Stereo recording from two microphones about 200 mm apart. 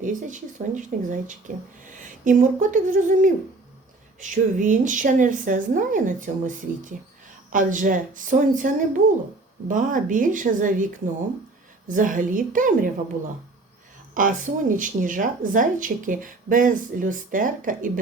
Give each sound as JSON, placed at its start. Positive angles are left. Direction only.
{"t": 0.0, "sound": "speech", "side_deg": -40}
{"t": 11.9, "sound": "speech", "side_deg": -40}
{"t": 14.1, "sound": "speech", "side_deg": -40}